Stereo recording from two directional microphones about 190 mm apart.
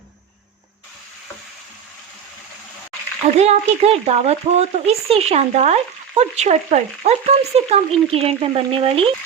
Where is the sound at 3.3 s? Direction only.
35° right (ahead or behind).